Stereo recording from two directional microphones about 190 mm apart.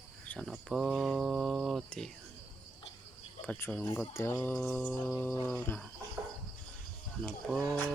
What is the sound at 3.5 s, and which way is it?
Speech, 5° left (ahead or behind).